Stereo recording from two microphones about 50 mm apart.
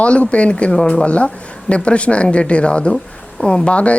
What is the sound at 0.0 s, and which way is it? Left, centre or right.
Speech, left.